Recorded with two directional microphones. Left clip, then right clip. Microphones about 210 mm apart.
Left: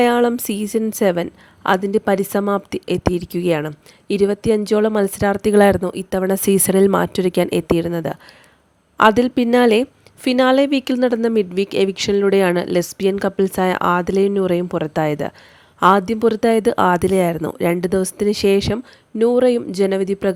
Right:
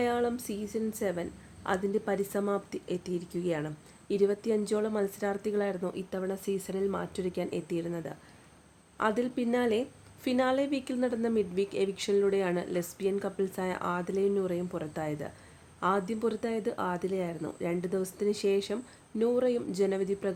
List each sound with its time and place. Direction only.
0.0 s a woman's voice: 50° left (ahead or behind)